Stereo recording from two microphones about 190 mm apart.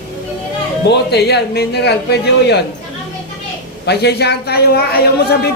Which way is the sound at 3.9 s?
60° left (ahead or behind).